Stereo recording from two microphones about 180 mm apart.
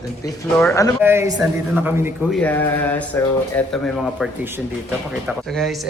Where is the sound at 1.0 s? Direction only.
15° right (ahead or behind).